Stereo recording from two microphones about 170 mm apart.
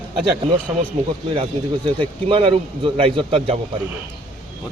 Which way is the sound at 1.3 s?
30° right (ahead or behind).